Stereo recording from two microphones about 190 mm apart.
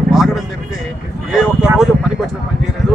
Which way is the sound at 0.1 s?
Centre (ahead or behind).